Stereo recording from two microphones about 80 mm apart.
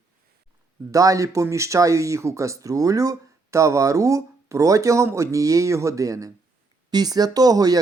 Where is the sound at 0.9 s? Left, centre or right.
Right.